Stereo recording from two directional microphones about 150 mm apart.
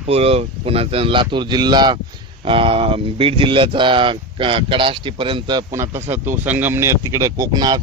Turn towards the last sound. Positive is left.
turn(degrees=-25)  # may be behind; listen again after turning